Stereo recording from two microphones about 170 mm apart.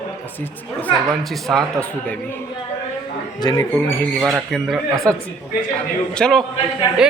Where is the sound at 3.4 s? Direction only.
25° left (ahead or behind).